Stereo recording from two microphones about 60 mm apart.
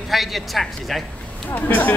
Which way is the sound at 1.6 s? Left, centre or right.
Left.